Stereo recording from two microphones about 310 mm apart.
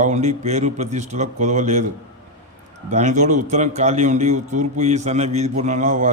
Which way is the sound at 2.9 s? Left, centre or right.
Right.